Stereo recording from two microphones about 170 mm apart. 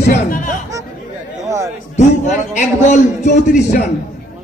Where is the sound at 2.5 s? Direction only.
45° left (ahead or behind).